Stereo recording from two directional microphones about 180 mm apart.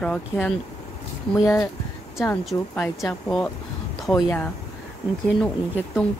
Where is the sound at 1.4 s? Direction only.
15° left (ahead or behind).